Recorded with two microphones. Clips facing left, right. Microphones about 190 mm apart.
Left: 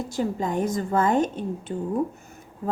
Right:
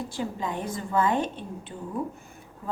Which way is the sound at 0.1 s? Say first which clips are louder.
Left 5 dB; 45° left (ahead or behind).